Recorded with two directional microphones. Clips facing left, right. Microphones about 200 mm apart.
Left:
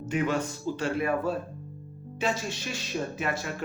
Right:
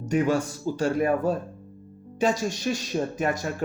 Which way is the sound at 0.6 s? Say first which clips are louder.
Right 5 dB; 40° right (ahead or behind).